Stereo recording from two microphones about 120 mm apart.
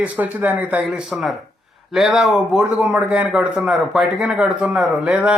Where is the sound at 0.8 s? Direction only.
Centre (ahead or behind).